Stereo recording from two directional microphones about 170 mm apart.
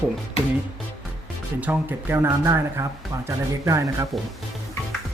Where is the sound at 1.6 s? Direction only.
10° right (ahead or behind).